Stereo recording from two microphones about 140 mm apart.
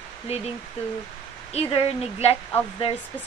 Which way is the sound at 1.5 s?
45° left (ahead or behind).